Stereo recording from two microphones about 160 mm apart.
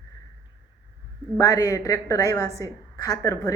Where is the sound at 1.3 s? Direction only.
20° left (ahead or behind).